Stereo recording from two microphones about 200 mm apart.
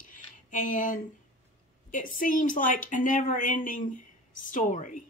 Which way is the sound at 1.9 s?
40° left (ahead or behind).